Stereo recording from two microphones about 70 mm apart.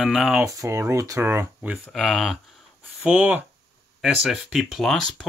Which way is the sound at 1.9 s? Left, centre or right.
Centre.